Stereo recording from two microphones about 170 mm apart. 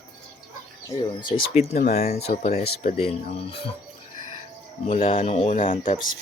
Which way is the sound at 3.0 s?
35° left (ahead or behind).